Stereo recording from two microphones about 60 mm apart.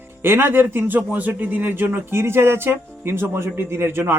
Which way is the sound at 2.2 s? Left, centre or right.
Right.